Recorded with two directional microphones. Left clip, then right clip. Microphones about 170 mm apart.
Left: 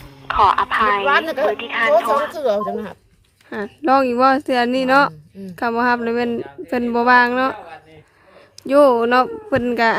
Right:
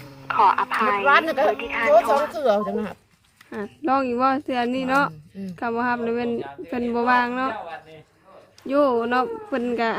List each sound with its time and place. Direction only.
0.3 s speech: 35° left (ahead or behind)
8.6 s speech: 35° left (ahead or behind)